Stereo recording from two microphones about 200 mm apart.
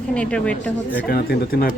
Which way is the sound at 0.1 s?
5° left (ahead or behind).